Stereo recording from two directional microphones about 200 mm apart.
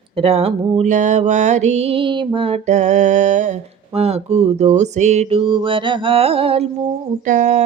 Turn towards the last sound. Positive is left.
turn(degrees=-35)  # may be behind; listen again after turning